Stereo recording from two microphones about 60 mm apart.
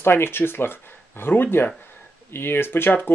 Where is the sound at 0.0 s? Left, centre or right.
Left.